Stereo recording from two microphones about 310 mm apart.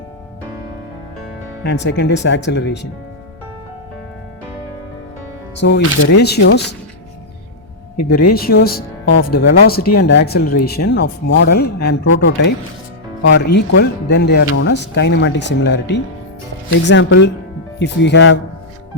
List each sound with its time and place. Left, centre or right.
1.6 s speech: left
5.5 s speech: left
8.3 s speech: left